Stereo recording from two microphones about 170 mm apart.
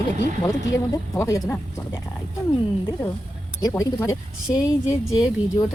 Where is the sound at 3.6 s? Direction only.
20° left (ahead or behind).